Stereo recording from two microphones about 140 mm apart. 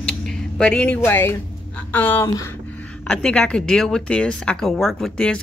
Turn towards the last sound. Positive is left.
turn(degrees=5)  # may be behind; listen again after turning